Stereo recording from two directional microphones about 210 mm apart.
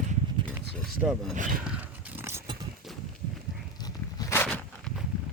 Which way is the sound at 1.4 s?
40° right (ahead or behind).